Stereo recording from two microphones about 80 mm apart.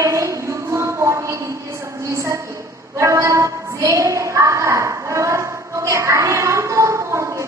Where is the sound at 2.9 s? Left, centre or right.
Right.